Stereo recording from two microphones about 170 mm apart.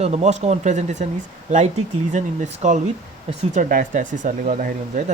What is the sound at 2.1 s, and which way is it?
Speech, 45° right (ahead or behind).